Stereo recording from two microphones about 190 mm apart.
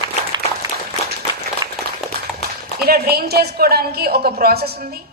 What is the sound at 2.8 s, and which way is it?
A woman's voice, 55° right (ahead or behind).